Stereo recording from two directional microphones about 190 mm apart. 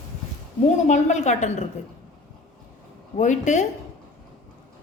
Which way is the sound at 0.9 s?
40° left (ahead or behind).